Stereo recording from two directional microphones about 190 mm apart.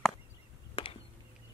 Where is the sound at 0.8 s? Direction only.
30° left (ahead or behind).